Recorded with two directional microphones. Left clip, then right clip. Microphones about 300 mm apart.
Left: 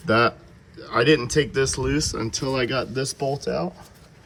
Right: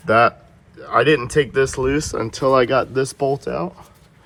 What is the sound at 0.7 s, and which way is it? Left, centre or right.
Speech, centre.